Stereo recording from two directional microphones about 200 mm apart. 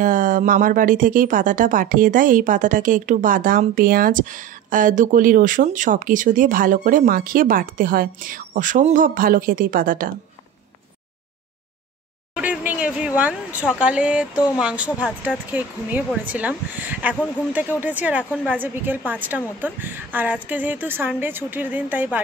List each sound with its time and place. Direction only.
0.0 s speech: 40° right (ahead or behind)
12.4 s a sound: 10° right (ahead or behind)
14.6 s speech: 5° right (ahead or behind)